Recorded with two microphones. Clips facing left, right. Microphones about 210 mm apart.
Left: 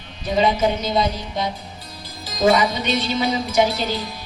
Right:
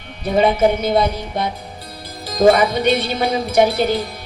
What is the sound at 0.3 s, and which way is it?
Speech, 55° right (ahead or behind).